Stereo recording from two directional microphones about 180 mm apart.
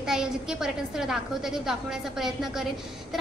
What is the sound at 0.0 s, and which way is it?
A woman's voice, 5° right (ahead or behind).